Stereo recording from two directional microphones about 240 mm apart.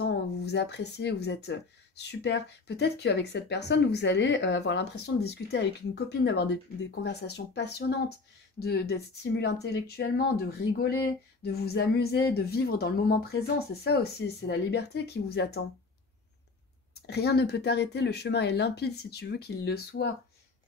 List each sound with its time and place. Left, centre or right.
0.0 s speech: left
17.0 s speech: left